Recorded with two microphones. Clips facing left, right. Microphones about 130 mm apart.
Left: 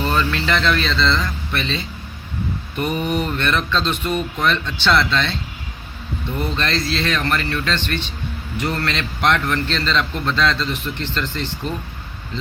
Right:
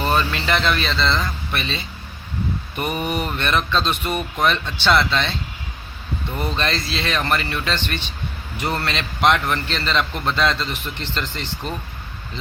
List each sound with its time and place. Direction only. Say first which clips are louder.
0.1 s a man's voice: right 1 dB; 15° right (ahead or behind)
6.6 s a man's voice: left 3 dB; 15° right (ahead or behind)